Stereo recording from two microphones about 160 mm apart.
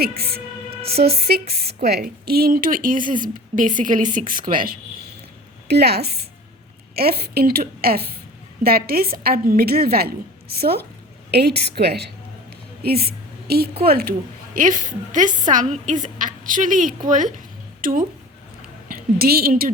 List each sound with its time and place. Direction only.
0.2 s a woman's voice: 75° right (ahead or behind)
5.6 s a woman's voice: 90° right
6.9 s a woman's voice: 75° right (ahead or behind)
11.3 s a woman's voice: 90° right
12.8 s a sound: 75° right (ahead or behind)
13.8 s a woman's voice: 70° right (ahead or behind); by 17.3 s 55° right (ahead or behind)
17.7 s a sound: 60° right (ahead or behind)
19.2 s a woman's voice: 70° right (ahead or behind)